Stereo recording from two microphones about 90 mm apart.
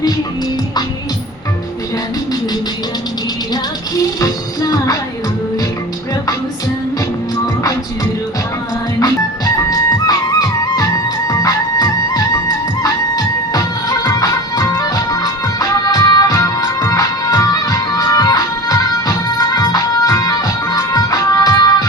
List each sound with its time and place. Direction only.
4.2 s music: 45° left (ahead or behind)
9.6 s music: 45° left (ahead or behind)